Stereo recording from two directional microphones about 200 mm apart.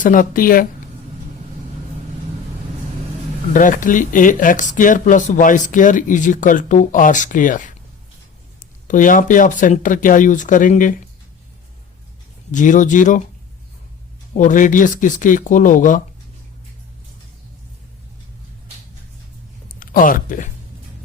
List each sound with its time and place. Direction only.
0.0 s speech: 45° left (ahead or behind)
3.5 s speech: 40° left (ahead or behind)
12.5 s speech: 40° left (ahead or behind)
14.3 s speech: 40° left (ahead or behind)
19.6 s speech: 45° left (ahead or behind)